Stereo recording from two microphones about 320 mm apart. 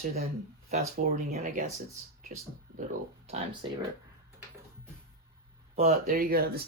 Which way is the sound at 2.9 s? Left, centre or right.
Right.